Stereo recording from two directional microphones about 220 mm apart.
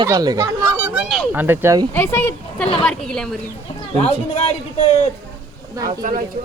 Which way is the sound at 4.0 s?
30° left (ahead or behind).